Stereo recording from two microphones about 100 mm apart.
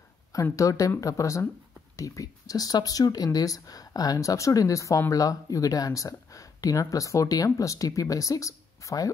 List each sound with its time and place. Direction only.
0.3 s speech: 35° left (ahead or behind)